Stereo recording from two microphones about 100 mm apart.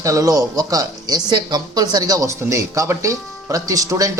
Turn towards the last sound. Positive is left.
turn(degrees=-35)  # may be behind; listen again after turning